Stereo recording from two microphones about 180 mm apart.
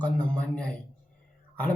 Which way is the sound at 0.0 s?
5° left (ahead or behind).